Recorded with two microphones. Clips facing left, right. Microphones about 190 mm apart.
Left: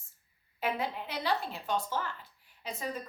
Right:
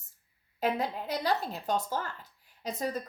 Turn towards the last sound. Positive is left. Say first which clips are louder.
# right 4 dB
turn(degrees=-40)  # may be behind; listen again after turning